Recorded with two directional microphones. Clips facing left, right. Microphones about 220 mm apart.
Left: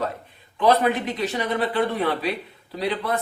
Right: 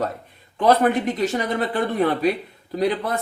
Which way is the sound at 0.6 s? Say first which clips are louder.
Right 2 dB; 45° right (ahead or behind).